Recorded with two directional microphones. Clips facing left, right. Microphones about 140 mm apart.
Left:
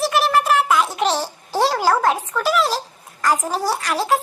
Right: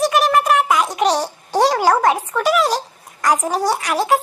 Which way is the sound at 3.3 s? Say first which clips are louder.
Right 5 dB; 10° right (ahead or behind).